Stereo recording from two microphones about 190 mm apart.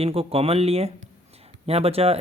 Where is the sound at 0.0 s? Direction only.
30° right (ahead or behind).